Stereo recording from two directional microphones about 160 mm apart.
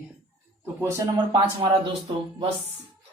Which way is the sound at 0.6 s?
15° right (ahead or behind).